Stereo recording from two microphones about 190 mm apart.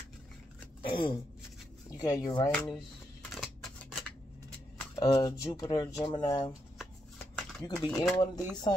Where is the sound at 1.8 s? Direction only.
20° left (ahead or behind).